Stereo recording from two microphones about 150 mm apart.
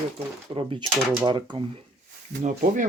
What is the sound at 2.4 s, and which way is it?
Speech, 60° right (ahead or behind).